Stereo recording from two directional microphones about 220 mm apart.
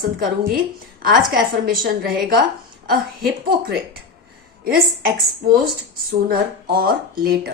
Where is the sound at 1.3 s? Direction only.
40° right (ahead or behind).